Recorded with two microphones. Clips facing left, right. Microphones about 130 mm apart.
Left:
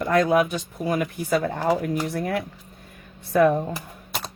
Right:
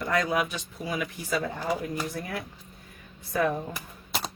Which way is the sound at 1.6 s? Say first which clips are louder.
Left 7 dB; 65° left (ahead or behind).